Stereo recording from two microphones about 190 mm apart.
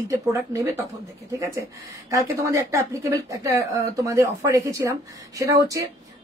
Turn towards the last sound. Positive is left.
turn(degrees=-15)  # may be behind; listen again after turning